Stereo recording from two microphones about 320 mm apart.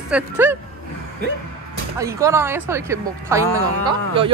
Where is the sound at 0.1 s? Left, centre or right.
Centre.